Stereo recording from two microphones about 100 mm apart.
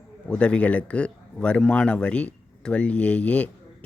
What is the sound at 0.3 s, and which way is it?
Speech, 10° left (ahead or behind).